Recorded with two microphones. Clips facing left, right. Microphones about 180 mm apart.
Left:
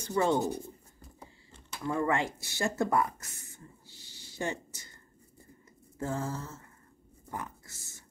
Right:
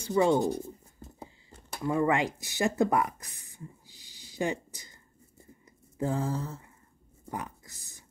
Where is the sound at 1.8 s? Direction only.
15° right (ahead or behind).